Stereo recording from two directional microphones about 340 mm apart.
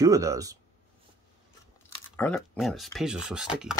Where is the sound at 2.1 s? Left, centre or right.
Centre.